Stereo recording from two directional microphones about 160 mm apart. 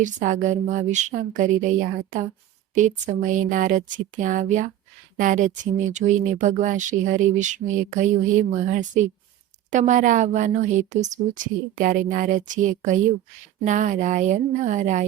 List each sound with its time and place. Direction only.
0.0 s speech: 50° right (ahead or behind)